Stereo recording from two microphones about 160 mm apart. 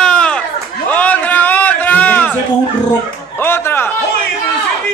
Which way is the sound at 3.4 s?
15° left (ahead or behind).